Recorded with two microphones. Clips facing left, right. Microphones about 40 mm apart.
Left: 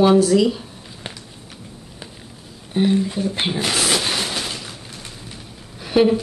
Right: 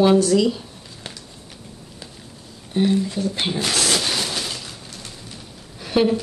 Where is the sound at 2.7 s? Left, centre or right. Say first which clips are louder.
Left 1 dB; centre.